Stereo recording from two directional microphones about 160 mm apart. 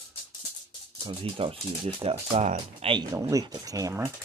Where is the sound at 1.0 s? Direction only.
35° right (ahead or behind).